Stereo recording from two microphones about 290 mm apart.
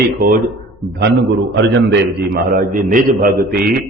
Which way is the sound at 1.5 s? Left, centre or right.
Right.